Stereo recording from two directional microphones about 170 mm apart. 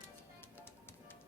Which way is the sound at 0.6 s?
15° left (ahead or behind).